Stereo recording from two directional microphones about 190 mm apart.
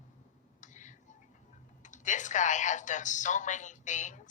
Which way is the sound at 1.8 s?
40° left (ahead or behind).